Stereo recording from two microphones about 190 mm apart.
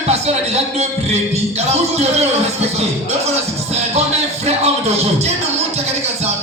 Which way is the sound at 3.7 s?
35° right (ahead or behind).